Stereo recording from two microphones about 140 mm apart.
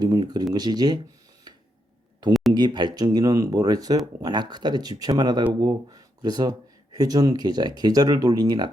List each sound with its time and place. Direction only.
0.0 s speech: 30° right (ahead or behind)
1.5 s a sound: 30° right (ahead or behind)
2.5 s speech: 30° right (ahead or behind)